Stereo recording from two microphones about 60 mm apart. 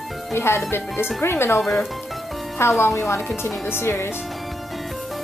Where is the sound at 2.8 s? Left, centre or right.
Left.